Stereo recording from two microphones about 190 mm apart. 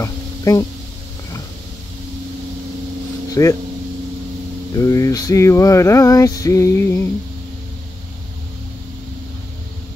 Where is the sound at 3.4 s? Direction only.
15° left (ahead or behind).